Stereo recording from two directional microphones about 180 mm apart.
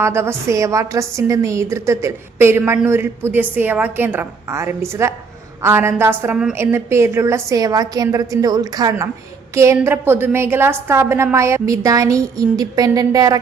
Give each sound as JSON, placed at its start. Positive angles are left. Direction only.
{"t": 0.0, "sound": "a woman's voice", "side_deg": -15}